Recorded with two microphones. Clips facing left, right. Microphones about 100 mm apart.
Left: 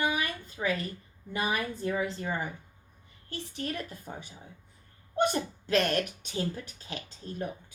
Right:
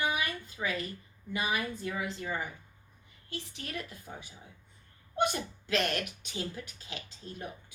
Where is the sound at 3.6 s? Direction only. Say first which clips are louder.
Left 9 dB; 40° left (ahead or behind).